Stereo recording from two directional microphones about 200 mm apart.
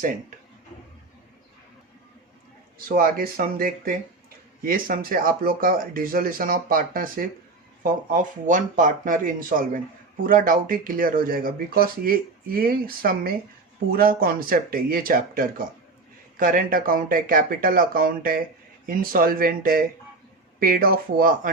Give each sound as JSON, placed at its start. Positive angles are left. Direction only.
{"t": 2.9, "sound": "speech", "side_deg": -45}